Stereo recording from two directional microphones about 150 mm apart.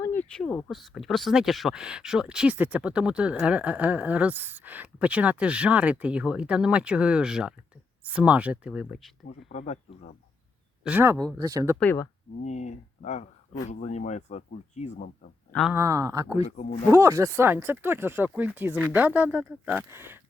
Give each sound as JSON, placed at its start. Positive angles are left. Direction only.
{"t": 0.0, "sound": "speech", "side_deg": 15}
{"t": 9.5, "sound": "speech", "side_deg": 50}
{"t": 10.8, "sound": "speech", "side_deg": -15}
{"t": 12.4, "sound": "speech", "side_deg": 50}
{"t": 14.9, "sound": "speech", "side_deg": 90}
{"t": 15.7, "sound": "speech", "side_deg": -20}
{"t": 16.4, "sound": "speech", "side_deg": 45}
{"t": 16.9, "sound": "speech", "side_deg": -20}